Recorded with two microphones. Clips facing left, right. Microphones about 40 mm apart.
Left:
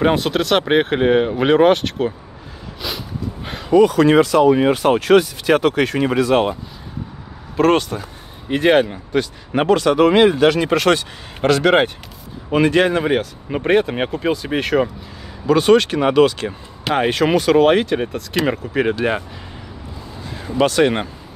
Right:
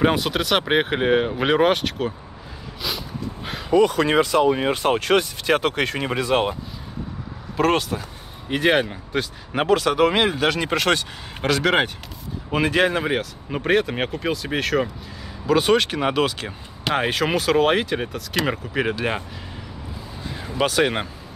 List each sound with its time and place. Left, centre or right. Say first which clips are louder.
0.0 s speech: left 3 dB; centre
2.8 s a sound: left 2 dB; centre
4.1 s speech: left 5 dB; centre
4.6 s speech: left 5 dB; left
5.6 s speech: left 5 dB; centre
6.1 s speech: left 4 dB; centre
7.5 s speech: left 5 dB; centre
15.4 s speech: left 5 dB; centre
20.4 s speech: left 5 dB; centre